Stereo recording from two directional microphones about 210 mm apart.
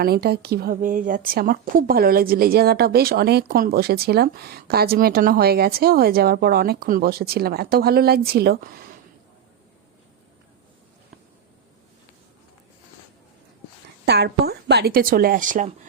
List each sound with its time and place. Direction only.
0.0 s a woman's voice: 50° right (ahead or behind)
14.0 s a woman's voice: 50° right (ahead or behind)